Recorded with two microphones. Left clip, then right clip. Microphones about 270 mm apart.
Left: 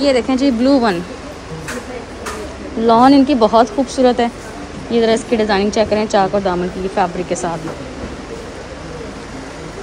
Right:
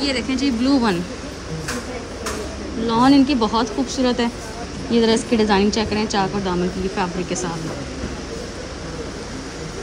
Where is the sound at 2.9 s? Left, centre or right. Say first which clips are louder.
Left 6 dB; centre.